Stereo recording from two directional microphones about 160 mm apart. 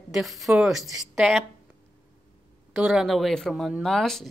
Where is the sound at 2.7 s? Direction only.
5° right (ahead or behind).